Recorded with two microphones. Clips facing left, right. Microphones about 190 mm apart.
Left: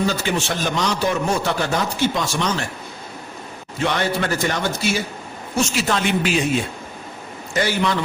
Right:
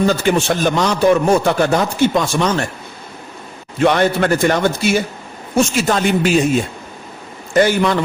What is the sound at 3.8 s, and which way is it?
A man's voice, 55° right (ahead or behind).